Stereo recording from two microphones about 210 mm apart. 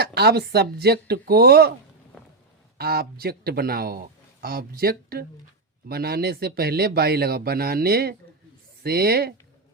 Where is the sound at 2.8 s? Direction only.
45° right (ahead or behind).